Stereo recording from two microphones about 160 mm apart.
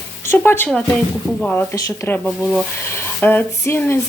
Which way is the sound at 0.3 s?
15° left (ahead or behind).